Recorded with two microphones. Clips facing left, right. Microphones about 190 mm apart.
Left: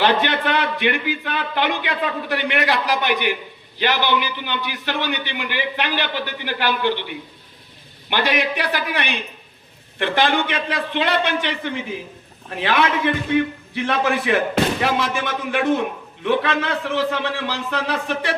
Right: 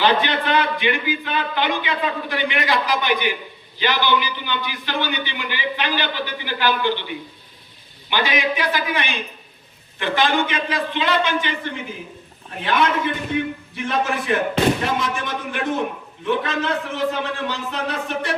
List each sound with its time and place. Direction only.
0.0 s a man's voice: 65° left (ahead or behind)
8.1 s a man's voice: 65° left (ahead or behind)
12.5 s a man's voice: 70° left (ahead or behind)